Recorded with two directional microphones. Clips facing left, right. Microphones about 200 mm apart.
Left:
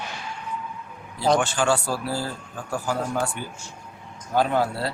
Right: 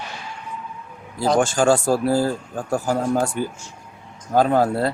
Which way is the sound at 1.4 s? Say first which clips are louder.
Right 6 dB; 40° right (ahead or behind).